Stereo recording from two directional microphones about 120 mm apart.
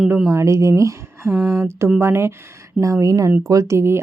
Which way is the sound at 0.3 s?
25° right (ahead or behind).